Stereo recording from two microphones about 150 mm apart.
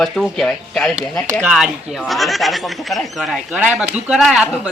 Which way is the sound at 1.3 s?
10° right (ahead or behind).